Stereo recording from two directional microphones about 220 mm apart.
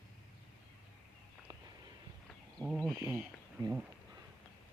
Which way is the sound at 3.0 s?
10° right (ahead or behind).